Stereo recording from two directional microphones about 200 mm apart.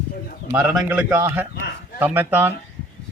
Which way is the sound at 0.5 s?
5° right (ahead or behind).